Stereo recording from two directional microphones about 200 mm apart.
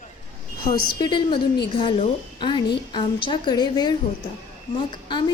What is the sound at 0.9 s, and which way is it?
Speech, 20° left (ahead or behind).